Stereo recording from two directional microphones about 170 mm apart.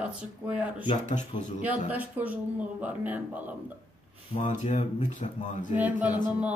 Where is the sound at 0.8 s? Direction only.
45° left (ahead or behind).